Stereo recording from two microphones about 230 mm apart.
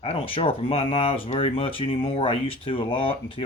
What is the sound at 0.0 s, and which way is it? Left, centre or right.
Speech, left.